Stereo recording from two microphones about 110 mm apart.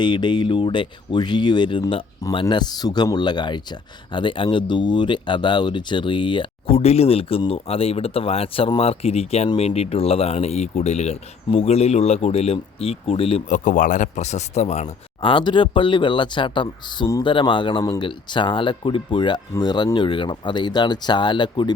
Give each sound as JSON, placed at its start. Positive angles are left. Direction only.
{"t": 0.0, "sound": "speech", "side_deg": 45}
{"t": 6.7, "sound": "speech", "side_deg": 70}
{"t": 14.2, "sound": "speech", "side_deg": 90}
{"t": 15.2, "sound": "speech", "side_deg": 50}